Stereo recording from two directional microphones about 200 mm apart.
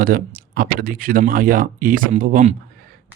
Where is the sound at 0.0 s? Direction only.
45° right (ahead or behind).